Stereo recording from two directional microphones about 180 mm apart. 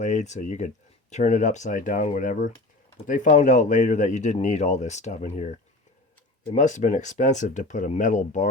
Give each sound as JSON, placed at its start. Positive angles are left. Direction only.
{"t": 0.0, "sound": "speech", "side_deg": 40}